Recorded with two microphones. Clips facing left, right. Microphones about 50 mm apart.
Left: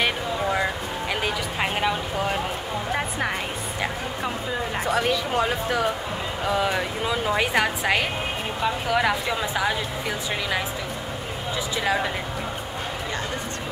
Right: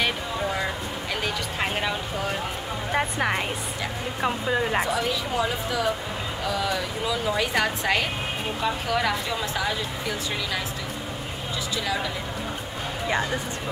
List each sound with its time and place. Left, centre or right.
0.0 s music: centre
2.9 s speech: centre
4.2 s speech: right
6.5 s speech: left
7.5 s a woman's voice: centre